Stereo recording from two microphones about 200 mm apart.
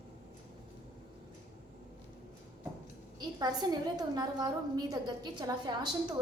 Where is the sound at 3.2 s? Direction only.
20° right (ahead or behind).